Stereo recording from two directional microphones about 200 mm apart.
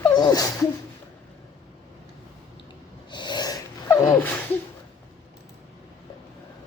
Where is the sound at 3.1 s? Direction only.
20° left (ahead or behind).